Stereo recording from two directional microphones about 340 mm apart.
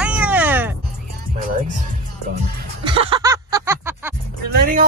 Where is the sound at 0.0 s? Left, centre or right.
Centre.